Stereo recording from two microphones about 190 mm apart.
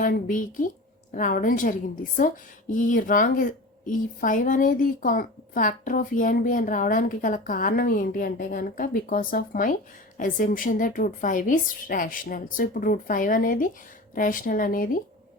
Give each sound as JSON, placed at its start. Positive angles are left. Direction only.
{"t": 0.0, "sound": "speech", "side_deg": 45}